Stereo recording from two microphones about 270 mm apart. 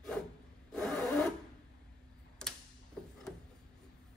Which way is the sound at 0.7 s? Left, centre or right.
Centre.